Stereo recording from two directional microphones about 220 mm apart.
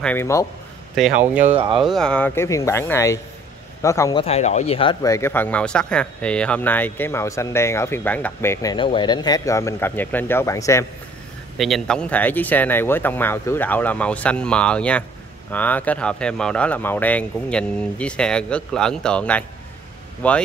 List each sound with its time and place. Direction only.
0.0 s speech: 10° left (ahead or behind)
0.9 s speech: 5° right (ahead or behind)
1.4 s speech: 25° right (ahead or behind)
1.8 s speech: centre (ahead or behind)
4.2 s speech: 30° left (ahead or behind); by 8.7 s 10° left (ahead or behind)
8.7 s speech: 20° left (ahead or behind)
11.5 s speech: centre (ahead or behind)